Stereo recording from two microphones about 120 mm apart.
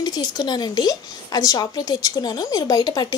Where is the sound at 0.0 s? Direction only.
30° left (ahead or behind).